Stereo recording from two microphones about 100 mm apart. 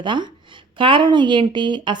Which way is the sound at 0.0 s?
50° right (ahead or behind).